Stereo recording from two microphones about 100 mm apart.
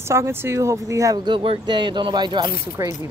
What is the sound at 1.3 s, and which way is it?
Speech, 55° right (ahead or behind).